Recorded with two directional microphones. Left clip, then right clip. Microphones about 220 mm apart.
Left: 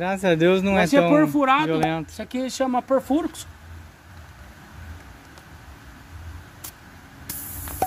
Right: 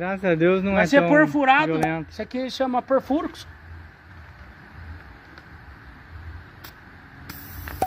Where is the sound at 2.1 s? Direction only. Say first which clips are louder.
Even; 15° right (ahead or behind).